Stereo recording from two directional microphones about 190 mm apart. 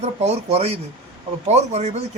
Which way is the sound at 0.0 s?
35° right (ahead or behind).